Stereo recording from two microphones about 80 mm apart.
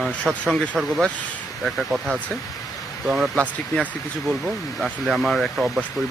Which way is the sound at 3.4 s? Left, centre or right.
Centre.